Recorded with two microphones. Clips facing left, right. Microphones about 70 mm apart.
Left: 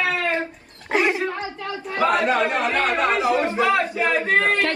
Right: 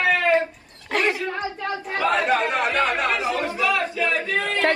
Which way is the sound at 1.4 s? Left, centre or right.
Right.